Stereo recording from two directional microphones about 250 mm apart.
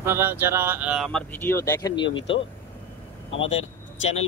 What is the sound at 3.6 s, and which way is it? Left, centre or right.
Speech, left.